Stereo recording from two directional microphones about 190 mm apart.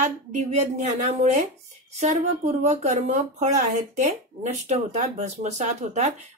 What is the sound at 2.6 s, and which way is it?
Speech, 40° right (ahead or behind).